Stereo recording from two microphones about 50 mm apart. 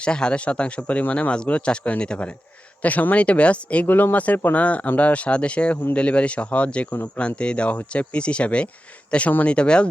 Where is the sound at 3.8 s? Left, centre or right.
Left.